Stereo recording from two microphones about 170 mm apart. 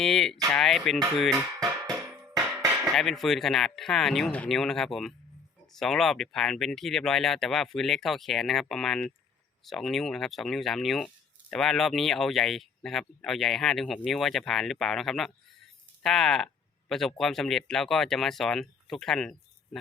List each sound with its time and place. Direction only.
0.0 s speech: centre (ahead or behind)
2.9 s speech: centre (ahead or behind)